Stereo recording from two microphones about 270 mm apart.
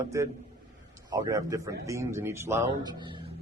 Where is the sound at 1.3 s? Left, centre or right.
Centre.